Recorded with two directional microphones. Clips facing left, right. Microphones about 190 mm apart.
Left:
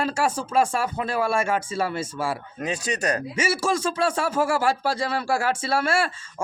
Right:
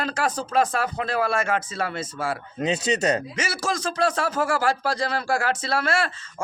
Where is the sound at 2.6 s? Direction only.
25° right (ahead or behind).